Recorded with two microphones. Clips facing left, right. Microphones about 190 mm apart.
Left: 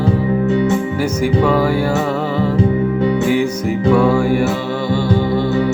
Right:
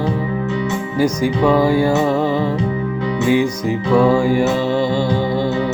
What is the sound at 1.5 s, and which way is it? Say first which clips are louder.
Music: right 1 dB; 15° right (ahead or behind).